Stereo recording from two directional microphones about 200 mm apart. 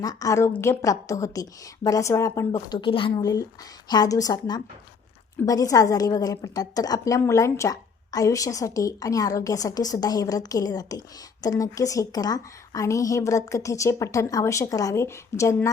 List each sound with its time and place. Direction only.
0.0 s a woman's voice: 20° left (ahead or behind)